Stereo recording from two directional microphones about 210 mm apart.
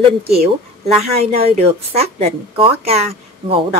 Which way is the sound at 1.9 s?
30° right (ahead or behind).